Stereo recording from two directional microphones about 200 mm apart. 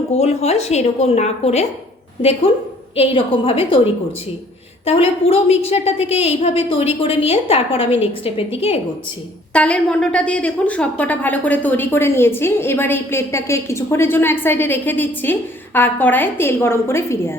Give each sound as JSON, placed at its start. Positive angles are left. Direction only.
{"t": 0.1, "sound": "a woman's voice", "side_deg": 35}
{"t": 4.9, "sound": "a woman's voice", "side_deg": 30}
{"t": 9.5, "sound": "a woman's voice", "side_deg": 5}